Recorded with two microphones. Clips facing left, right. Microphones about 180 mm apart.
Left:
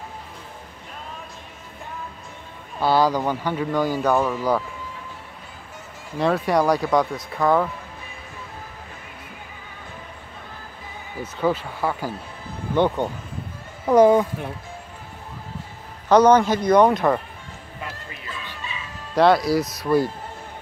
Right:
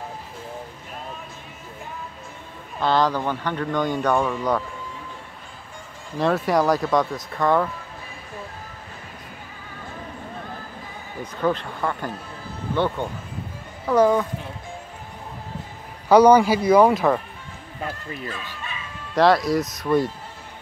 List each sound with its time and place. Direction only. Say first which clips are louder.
2.8 s speech: left 2 dB; 10° left (ahead or behind)
6.1 s speech: even; centre (ahead or behind)
11.4 s speech: left 1 dB; 5° left (ahead or behind)
12.7 s speech: left 3 dB; 15° left (ahead or behind)
16.1 s speech: right 1 dB; 10° right (ahead or behind)
17.8 s speech: right 6 dB; 45° right (ahead or behind)
19.1 s speech: left 1 dB; centre (ahead or behind)